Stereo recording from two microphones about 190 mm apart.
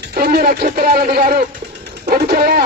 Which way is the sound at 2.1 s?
55° right (ahead or behind).